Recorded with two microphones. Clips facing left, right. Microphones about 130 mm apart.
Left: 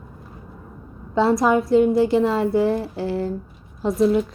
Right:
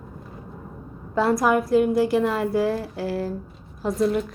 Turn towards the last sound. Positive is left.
turn(degrees=0)  # may be behind; listen again after turning